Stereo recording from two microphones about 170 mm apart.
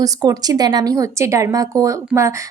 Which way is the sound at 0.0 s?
20° right (ahead or behind).